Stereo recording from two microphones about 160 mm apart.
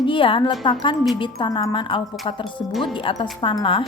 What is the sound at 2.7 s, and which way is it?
Speech, centre (ahead or behind).